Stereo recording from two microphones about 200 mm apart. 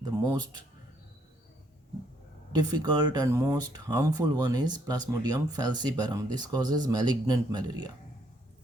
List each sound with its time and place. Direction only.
0.0 s speech: 20° right (ahead or behind)
2.5 s speech: 20° right (ahead or behind)